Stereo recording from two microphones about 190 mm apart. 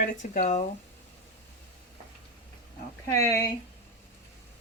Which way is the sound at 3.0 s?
15° left (ahead or behind).